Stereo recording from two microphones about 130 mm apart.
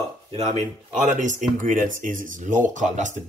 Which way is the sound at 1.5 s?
90° right.